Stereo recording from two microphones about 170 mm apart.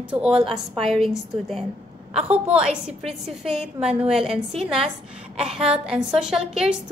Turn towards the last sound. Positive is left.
turn(degrees=-5)  # may be behind; listen again after turning